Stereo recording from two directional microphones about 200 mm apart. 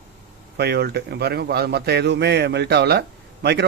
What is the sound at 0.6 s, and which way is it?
A man's voice, 55° right (ahead or behind).